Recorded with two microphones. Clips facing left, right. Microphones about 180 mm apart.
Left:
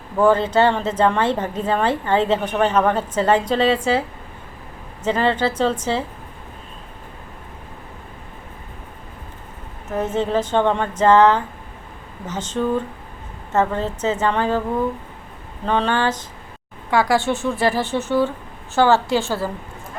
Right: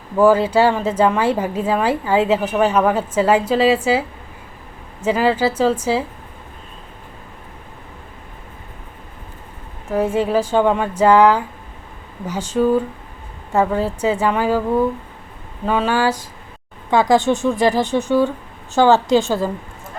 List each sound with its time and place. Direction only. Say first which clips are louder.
0.2 s a woman's voice: right 2 dB; 10° right (ahead or behind)
5.0 s a woman's voice: right 2 dB; 5° right (ahead or behind)
9.9 s a woman's voice: right 3 dB; 10° right (ahead or behind)
15.6 s a woman's voice: right 2 dB; 5° right (ahead or behind)
16.9 s a woman's voice: right 4 dB; 20° right (ahead or behind)